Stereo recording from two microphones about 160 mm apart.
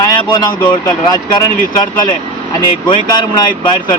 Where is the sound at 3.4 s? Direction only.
30° left (ahead or behind).